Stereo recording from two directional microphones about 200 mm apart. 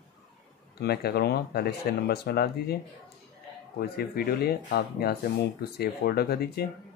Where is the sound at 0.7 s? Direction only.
55° left (ahead or behind).